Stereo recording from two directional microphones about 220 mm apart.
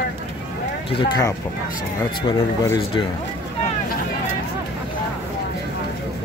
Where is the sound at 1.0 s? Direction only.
15° left (ahead or behind).